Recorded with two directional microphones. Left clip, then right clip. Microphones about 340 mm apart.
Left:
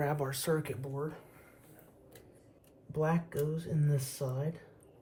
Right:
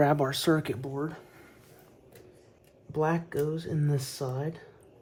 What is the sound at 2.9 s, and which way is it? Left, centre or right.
Speech, right.